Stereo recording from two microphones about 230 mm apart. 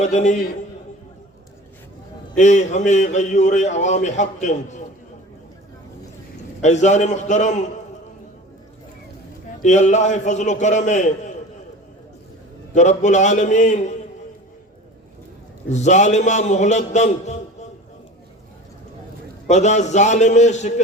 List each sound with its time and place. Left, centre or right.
0.0 s a man's voice: left
2.3 s a man's voice: left
6.6 s a man's voice: left
9.6 s a man's voice: left
12.7 s a man's voice: left
15.7 s a man's voice: left
19.5 s a man's voice: left